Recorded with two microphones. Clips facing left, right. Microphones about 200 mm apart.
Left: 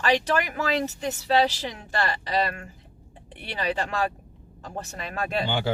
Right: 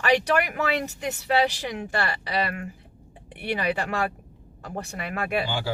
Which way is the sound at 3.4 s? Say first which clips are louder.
Right 2 dB; 15° right (ahead or behind).